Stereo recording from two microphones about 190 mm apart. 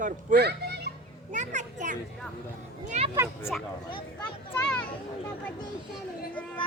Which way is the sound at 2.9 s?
35° right (ahead or behind).